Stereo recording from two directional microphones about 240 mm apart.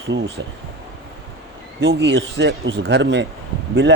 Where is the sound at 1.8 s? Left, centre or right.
Right.